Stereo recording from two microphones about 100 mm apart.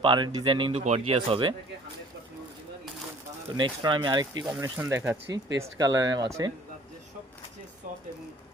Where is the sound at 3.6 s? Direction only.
50° right (ahead or behind).